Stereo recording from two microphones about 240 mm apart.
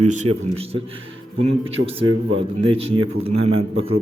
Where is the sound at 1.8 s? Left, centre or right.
Right.